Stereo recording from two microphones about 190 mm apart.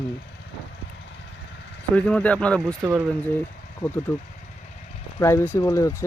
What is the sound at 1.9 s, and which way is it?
Speech, 5° left (ahead or behind).